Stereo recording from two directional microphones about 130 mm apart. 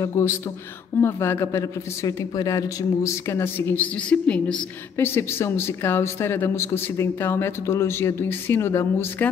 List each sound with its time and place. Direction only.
0.0 s speech: 20° left (ahead or behind)
4.9 s speech: 20° left (ahead or behind)